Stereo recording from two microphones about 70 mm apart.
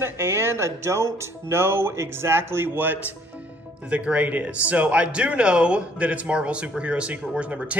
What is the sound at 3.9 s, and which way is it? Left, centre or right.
Speech, centre.